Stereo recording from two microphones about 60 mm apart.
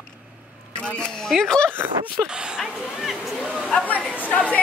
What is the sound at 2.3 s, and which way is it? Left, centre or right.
Speech, centre.